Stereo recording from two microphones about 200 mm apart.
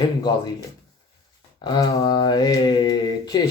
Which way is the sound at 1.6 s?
20° left (ahead or behind).